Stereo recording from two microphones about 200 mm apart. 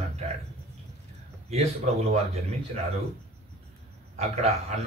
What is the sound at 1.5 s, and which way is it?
Speech, 30° right (ahead or behind).